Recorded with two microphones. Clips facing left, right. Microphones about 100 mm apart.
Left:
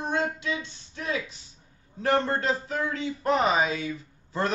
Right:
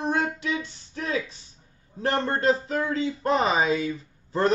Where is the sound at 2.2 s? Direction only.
35° right (ahead or behind).